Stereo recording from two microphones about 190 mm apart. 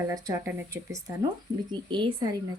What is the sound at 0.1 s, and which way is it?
A woman's voice, 20° right (ahead or behind).